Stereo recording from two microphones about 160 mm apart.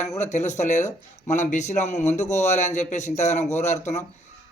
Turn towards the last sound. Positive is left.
turn(degrees=45)  # may be behind; listen again after turning